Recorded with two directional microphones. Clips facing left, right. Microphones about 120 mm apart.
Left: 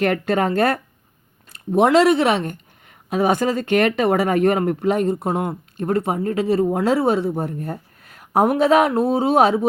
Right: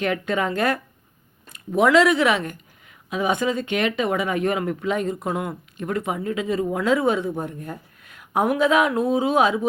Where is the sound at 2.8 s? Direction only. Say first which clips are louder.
Left 5 dB; 45° left (ahead or behind).